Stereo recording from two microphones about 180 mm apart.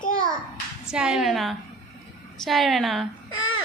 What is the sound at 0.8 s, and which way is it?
A woman's voice, 5° right (ahead or behind).